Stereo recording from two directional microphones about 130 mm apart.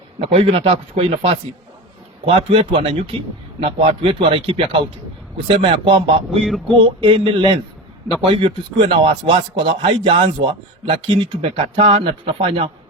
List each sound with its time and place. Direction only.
0.3 s a man's voice: 45° right (ahead or behind)